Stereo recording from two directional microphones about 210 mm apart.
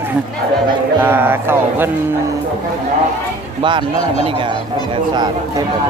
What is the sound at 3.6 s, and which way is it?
Speech, 25° right (ahead or behind).